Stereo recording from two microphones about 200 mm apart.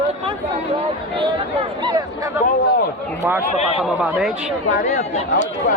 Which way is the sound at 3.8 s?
Centre (ahead or behind).